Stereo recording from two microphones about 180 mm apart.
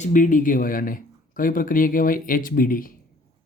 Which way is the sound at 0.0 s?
45° left (ahead or behind).